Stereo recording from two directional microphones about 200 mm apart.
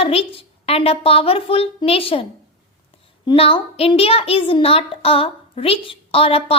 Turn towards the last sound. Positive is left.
turn(degrees=30)  # may be behind; listen again after turning